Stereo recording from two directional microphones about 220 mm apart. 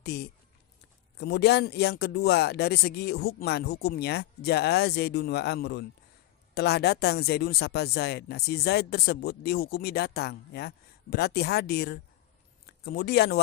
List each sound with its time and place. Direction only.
0.0 s speech: 45° left (ahead or behind)